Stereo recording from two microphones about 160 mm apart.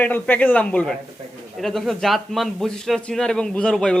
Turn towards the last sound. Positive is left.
turn(degrees=5)  # may be behind; listen again after turning